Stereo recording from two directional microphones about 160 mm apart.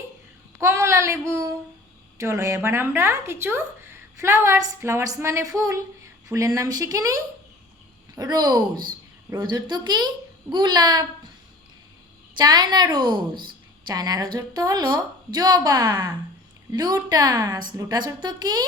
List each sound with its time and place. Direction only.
0.6 s a woman's voice: 20° right (ahead or behind)
12.4 s a woman's voice: 25° right (ahead or behind)